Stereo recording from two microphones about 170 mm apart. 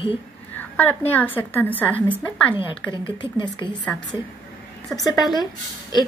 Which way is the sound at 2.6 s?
25° left (ahead or behind).